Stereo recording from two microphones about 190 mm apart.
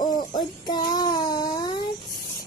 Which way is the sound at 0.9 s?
20° left (ahead or behind).